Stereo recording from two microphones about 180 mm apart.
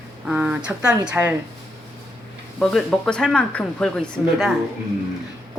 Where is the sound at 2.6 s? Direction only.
5° left (ahead or behind).